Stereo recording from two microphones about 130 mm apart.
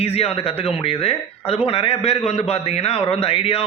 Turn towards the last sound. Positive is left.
turn(degrees=45)  # may be behind; listen again after turning